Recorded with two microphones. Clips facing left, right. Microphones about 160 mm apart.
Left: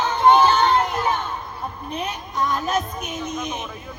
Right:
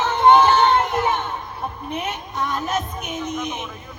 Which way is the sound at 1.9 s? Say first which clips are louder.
Left 1 dB; 20° right (ahead or behind).